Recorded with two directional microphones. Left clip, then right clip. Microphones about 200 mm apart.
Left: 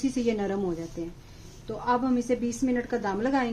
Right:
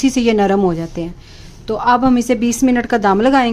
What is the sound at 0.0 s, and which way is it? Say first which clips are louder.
A woman's voice: right 14 dB; 35° right (ahead or behind).